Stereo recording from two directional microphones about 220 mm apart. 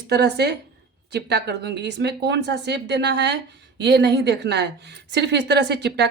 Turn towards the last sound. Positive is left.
turn(degrees=-50)  # may be behind; listen again after turning